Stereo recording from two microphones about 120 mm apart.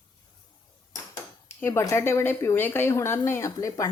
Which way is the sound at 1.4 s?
20° left (ahead or behind).